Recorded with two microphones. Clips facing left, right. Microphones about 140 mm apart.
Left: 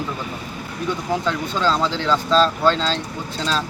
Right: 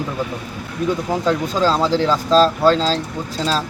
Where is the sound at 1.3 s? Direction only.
40° right (ahead or behind).